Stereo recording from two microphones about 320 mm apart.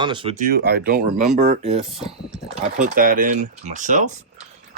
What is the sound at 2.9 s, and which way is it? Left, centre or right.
Speech, right.